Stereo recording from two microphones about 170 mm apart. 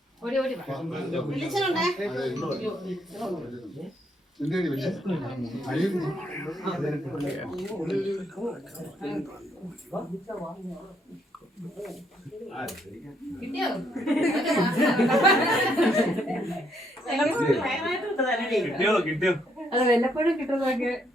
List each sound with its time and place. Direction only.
0.2 s speech: centre (ahead or behind)
9.9 s speech: 15° left (ahead or behind)
12.5 s speech: centre (ahead or behind)